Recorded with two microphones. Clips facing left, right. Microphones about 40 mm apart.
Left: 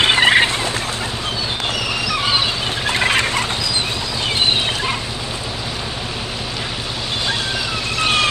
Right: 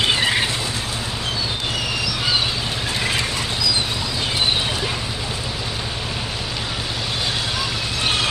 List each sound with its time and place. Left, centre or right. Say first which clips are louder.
0.0 s vehicle: left 6 dB; left
3.0 s vehicle: left 6 dB; left